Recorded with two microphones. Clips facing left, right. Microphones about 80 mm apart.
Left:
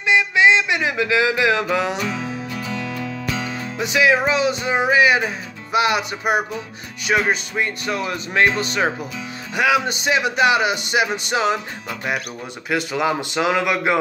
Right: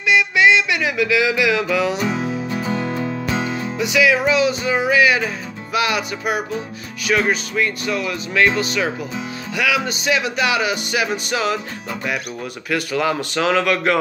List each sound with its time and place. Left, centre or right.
0.0 s music: left
2.6 s music: right
3.7 s music: left
7.1 s speech: left
9.6 s music: left
12.6 s speech: left